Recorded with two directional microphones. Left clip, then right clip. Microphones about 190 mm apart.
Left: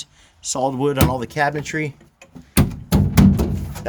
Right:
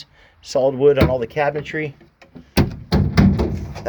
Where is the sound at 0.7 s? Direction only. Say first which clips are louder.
Right 7 dB; 30° left (ahead or behind).